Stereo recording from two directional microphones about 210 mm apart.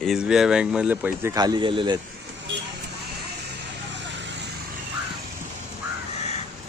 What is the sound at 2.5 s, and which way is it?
Vehicle, 60° right (ahead or behind).